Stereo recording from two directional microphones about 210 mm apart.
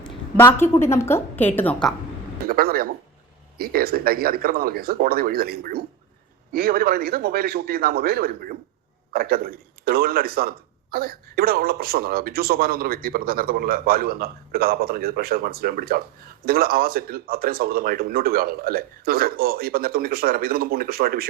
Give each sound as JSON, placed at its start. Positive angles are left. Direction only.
{"t": 0.0, "sound": "a woman's voice", "side_deg": 10}
{"t": 2.5, "sound": "speech", "side_deg": -45}